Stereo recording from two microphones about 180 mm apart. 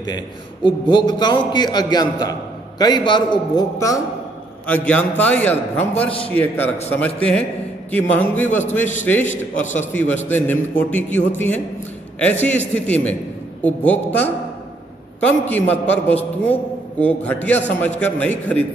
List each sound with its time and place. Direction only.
0.7 s a man's voice: 25° left (ahead or behind)
4.6 s a man's voice: 10° left (ahead or behind)